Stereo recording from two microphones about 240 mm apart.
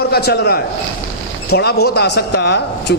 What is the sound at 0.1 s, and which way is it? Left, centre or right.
A man's voice, left.